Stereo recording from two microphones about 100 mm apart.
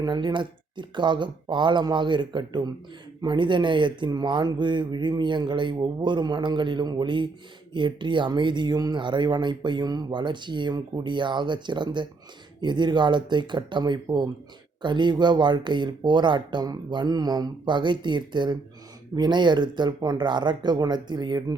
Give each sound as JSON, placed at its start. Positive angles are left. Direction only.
{"t": 0.0, "sound": "speech", "side_deg": -45}